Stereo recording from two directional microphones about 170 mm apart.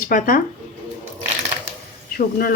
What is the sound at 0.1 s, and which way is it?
Speech, 50° left (ahead or behind).